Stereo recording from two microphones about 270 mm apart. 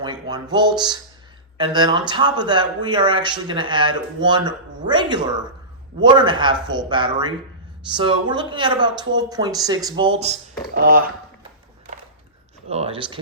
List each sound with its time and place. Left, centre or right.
0.0 s speech: centre
12.7 s speech: right